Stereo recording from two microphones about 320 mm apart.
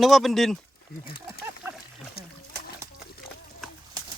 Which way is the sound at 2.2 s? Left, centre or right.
Left.